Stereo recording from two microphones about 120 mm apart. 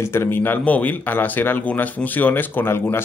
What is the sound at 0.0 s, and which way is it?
Speech, 20° left (ahead or behind).